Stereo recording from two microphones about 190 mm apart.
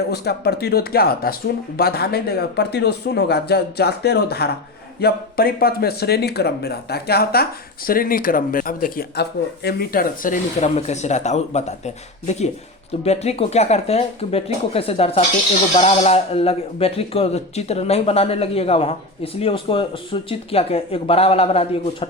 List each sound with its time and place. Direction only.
0.1 s a man's voice: 60° left (ahead or behind)
10.6 s speech: 35° left (ahead or behind)
13.1 s speech: 35° left (ahead or behind)